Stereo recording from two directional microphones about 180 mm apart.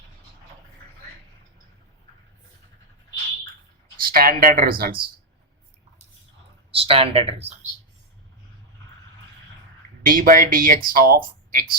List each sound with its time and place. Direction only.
4.0 s speech: 55° right (ahead or behind)
6.7 s speech: 30° right (ahead or behind)
10.0 s speech: 50° right (ahead or behind)